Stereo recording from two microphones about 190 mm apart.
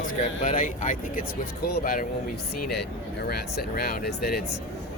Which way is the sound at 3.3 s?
55° left (ahead or behind).